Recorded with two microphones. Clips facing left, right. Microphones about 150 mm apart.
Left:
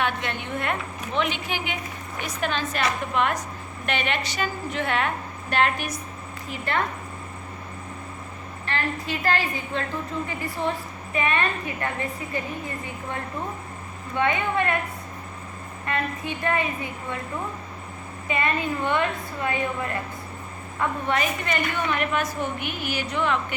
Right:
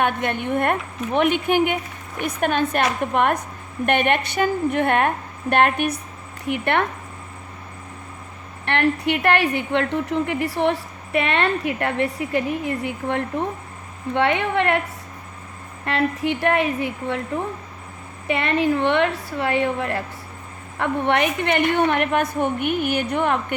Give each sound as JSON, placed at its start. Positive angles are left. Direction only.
{"t": 0.0, "sound": "a woman's voice", "side_deg": -50}
{"t": 8.6, "sound": "a woman's voice", "side_deg": -70}
{"t": 15.9, "sound": "a woman's voice", "side_deg": -75}
{"t": 18.3, "sound": "a woman's voice", "side_deg": -70}